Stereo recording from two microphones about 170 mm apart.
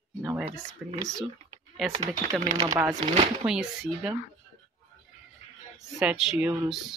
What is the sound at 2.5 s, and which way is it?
Speech, 30° right (ahead or behind).